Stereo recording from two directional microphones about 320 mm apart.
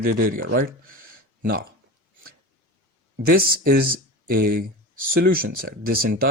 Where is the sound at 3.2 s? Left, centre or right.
Right.